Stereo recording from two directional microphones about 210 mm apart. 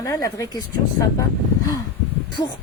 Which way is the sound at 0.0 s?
15° left (ahead or behind).